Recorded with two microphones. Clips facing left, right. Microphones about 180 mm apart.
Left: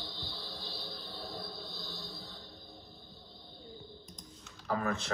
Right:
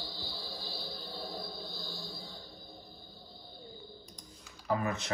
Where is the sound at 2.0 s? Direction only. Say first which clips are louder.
Right 1 dB; centre (ahead or behind).